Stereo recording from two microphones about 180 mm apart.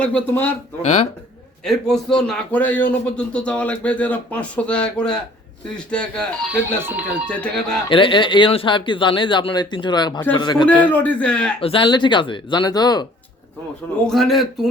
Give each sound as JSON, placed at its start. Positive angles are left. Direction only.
{"t": 0.0, "sound": "speech", "side_deg": 10}
{"t": 1.6, "sound": "a man's voice", "side_deg": 0}
{"t": 6.7, "sound": "speech", "side_deg": -10}
{"t": 7.3, "sound": "a man's voice", "side_deg": 5}
{"t": 7.9, "sound": "speech", "side_deg": 30}
{"t": 10.7, "sound": "speech", "side_deg": 10}
{"t": 11.6, "sound": "speech", "side_deg": 30}
{"t": 14.1, "sound": "a man's voice", "side_deg": 0}